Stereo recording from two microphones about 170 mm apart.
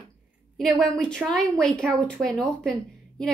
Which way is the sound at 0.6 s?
5° left (ahead or behind).